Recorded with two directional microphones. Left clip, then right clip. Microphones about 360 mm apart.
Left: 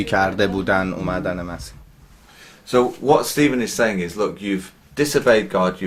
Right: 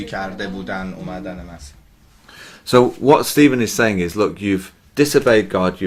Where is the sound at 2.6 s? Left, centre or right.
Right.